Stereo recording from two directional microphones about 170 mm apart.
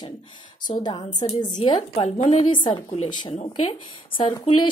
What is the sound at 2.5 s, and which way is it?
Speech, 30° left (ahead or behind).